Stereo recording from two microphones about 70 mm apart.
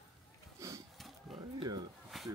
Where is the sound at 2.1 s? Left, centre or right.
Centre.